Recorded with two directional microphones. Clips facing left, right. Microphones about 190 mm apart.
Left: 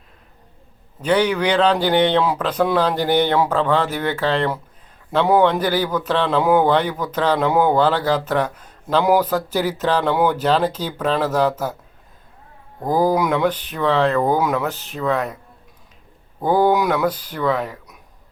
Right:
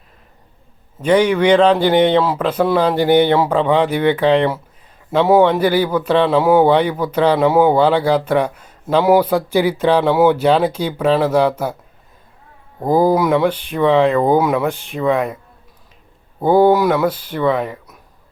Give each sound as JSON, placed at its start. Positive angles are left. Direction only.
{"t": 1.0, "sound": "a man's voice", "side_deg": -10}
{"t": 12.8, "sound": "a man's voice", "side_deg": -10}
{"t": 16.4, "sound": "a man's voice", "side_deg": -10}